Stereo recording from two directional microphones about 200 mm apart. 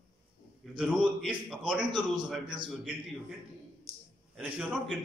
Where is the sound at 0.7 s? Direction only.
Centre (ahead or behind).